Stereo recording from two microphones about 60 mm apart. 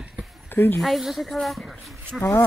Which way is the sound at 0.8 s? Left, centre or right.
Centre.